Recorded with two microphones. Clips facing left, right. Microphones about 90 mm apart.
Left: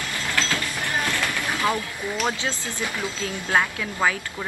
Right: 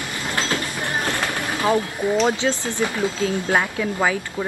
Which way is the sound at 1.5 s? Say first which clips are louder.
Right 6 dB; 20° right (ahead or behind).